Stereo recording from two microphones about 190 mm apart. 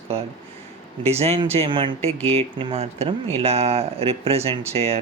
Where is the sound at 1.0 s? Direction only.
35° right (ahead or behind).